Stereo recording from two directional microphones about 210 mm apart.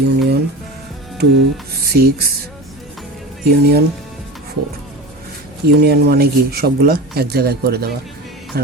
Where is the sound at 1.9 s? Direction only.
50° right (ahead or behind).